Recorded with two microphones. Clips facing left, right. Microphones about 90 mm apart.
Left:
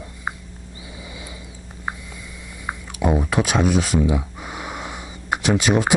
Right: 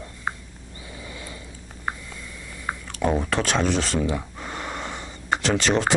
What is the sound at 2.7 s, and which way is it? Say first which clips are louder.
Speech: left 2 dB; 10° left (ahead or behind).